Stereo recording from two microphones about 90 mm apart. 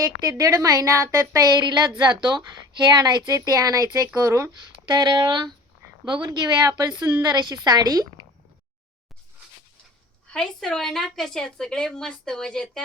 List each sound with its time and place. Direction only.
0.0 s a woman's voice: 45° right (ahead or behind)
4.9 s a woman's voice: 55° right (ahead or behind)
10.3 s a woman's voice: 10° left (ahead or behind)